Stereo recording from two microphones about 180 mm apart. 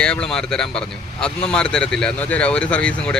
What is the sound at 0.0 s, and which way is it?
A man's voice, 5° left (ahead or behind).